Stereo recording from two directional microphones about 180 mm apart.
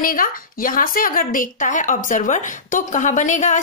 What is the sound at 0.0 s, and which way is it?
A woman's voice, 50° left (ahead or behind).